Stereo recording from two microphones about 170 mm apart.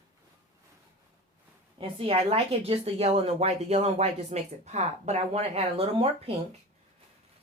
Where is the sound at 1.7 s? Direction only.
30° right (ahead or behind).